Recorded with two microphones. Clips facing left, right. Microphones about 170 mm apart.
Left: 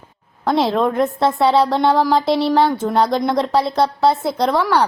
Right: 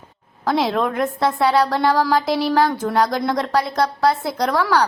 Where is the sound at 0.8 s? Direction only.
25° left (ahead or behind).